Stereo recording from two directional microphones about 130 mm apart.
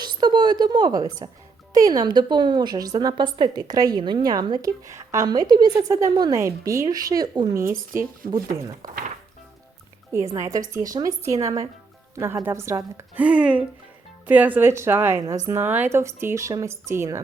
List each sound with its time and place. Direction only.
0.0 s a woman's voice: 35° right (ahead or behind)
8.2 s speech: 90° right
10.3 s speech: 25° right (ahead or behind)
13.1 s a woman's voice: 10° right (ahead or behind)